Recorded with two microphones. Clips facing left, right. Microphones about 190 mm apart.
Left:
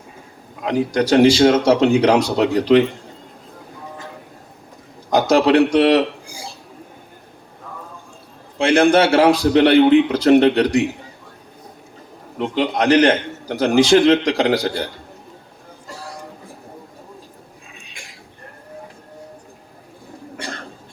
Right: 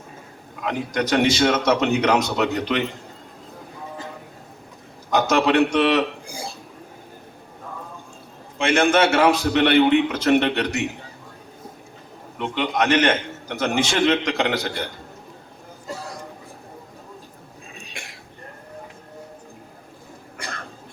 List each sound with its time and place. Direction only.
0.6 s a man's voice: 35° left (ahead or behind)
5.3 s a man's voice: 35° left (ahead or behind)
6.2 s dishes: 55° right (ahead or behind)
8.5 s a man's voice: 35° left (ahead or behind)
12.4 s a man's voice: 35° left (ahead or behind)
20.3 s cough: 30° left (ahead or behind)